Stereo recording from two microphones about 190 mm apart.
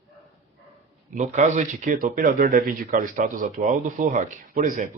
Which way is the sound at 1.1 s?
40° right (ahead or behind).